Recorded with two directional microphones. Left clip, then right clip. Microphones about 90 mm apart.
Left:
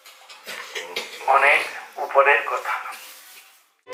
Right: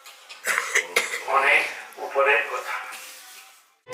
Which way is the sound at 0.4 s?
40° right (ahead or behind).